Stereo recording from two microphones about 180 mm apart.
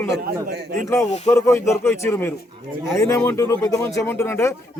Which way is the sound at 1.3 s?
15° left (ahead or behind).